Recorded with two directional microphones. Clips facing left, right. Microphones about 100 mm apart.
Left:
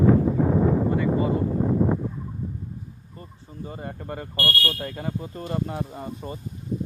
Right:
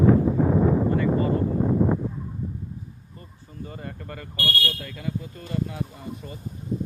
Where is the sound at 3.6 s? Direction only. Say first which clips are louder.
Left 4 dB; 25° left (ahead or behind).